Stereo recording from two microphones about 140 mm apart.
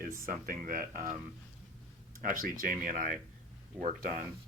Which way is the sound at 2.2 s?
80° right.